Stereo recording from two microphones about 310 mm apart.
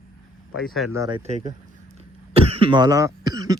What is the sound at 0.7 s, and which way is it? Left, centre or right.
Cough, centre.